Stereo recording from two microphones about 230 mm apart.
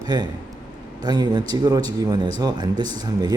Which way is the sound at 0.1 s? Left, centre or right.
Centre.